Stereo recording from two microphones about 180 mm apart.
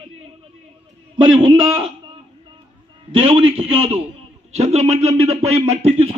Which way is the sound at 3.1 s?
30° right (ahead or behind).